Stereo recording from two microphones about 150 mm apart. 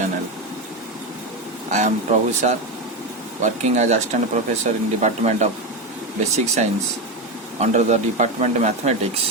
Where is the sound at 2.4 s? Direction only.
55° right (ahead or behind).